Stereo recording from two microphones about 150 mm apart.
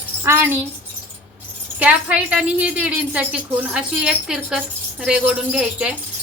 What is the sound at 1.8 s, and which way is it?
A woman's voice, 10° right (ahead or behind).